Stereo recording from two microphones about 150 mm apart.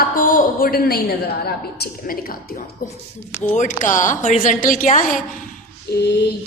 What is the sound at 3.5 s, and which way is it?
A woman's voice, 60° left (ahead or behind).